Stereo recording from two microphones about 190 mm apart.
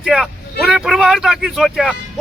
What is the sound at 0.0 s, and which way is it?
Vehicle, centre (ahead or behind).